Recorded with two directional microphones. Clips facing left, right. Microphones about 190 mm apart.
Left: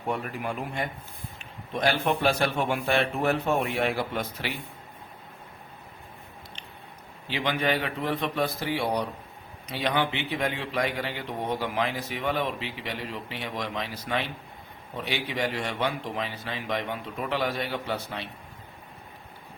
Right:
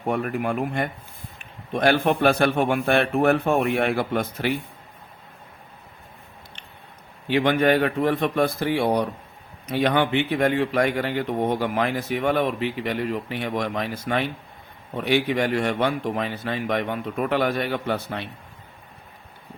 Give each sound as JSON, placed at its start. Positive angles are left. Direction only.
{"t": 0.1, "sound": "a man's voice", "side_deg": -55}
{"t": 7.3, "sound": "speech", "side_deg": -55}